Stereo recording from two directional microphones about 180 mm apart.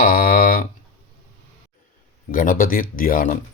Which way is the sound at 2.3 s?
50° left (ahead or behind).